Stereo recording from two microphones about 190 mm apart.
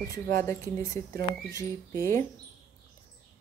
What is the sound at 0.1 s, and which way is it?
Speech, 15° left (ahead or behind).